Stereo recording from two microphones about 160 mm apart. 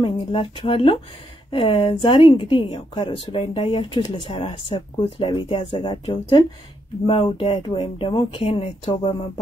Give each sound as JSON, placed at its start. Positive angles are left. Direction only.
{"t": 0.0, "sound": "speech", "side_deg": 30}